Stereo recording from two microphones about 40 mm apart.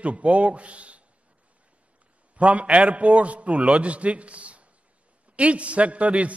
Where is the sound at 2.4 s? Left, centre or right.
Right.